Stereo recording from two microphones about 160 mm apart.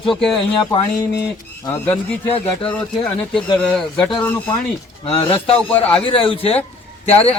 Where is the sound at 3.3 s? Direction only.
5° left (ahead or behind).